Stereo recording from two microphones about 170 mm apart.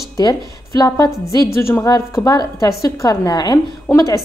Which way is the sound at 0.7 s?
20° left (ahead or behind).